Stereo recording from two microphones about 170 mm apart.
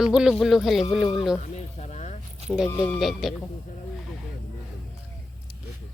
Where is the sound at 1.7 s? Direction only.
40° left (ahead or behind).